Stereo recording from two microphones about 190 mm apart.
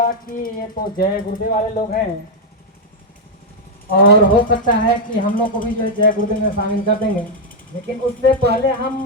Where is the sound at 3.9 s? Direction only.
50° left (ahead or behind).